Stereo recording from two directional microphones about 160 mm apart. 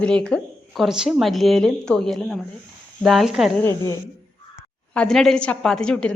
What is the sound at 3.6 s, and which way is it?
Speech, 15° left (ahead or behind).